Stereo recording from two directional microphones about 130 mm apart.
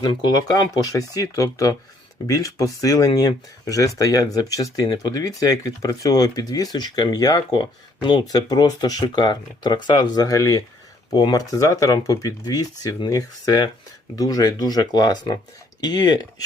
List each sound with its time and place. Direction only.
0.0 s speech: 35° left (ahead or behind)